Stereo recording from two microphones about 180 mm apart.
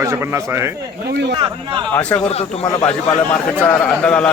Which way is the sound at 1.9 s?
10° left (ahead or behind).